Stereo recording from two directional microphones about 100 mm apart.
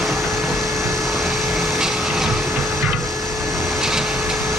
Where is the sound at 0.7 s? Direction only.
30° right (ahead or behind).